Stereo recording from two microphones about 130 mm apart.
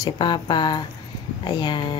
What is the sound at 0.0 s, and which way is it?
Speech, 35° left (ahead or behind).